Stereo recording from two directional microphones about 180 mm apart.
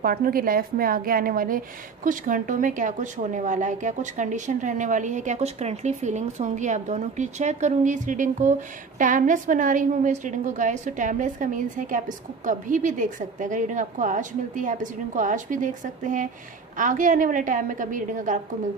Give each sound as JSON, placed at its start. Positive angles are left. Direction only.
{"t": 0.0, "sound": "a woman's voice", "side_deg": -55}